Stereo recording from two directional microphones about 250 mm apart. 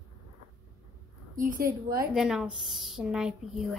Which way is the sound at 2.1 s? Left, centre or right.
Centre.